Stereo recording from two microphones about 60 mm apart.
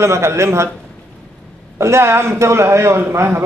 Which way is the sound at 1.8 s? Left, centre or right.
Right.